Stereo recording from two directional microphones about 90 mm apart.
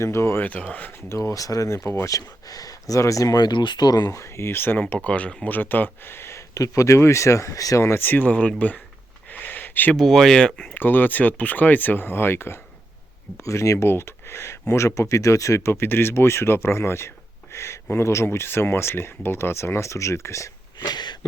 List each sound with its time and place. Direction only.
0.0 s speech: 30° left (ahead or behind)
0.4 s speech: 15° left (ahead or behind)
1.0 s speech: 30° left (ahead or behind); by 8.8 s 15° left (ahead or behind)
9.3 s a sound: 20° left (ahead or behind)
10.0 s speech: 5° left (ahead or behind)
10.8 s speech: 20° left (ahead or behind)
20.7 s a sound: 50° left (ahead or behind)